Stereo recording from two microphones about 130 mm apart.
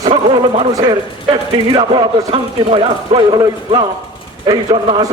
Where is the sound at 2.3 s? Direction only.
45° right (ahead or behind).